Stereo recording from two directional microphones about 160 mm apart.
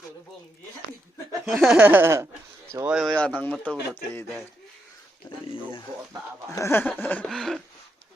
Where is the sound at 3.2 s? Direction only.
5° left (ahead or behind).